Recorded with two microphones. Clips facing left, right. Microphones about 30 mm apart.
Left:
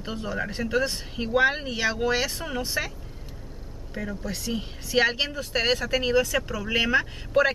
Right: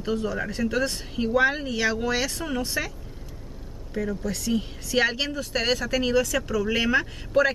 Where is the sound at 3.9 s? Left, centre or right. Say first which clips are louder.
Right 4 dB; centre.